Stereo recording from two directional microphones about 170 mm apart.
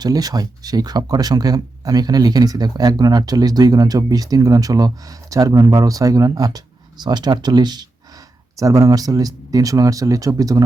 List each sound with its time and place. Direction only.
0.0 s speech: 20° right (ahead or behind)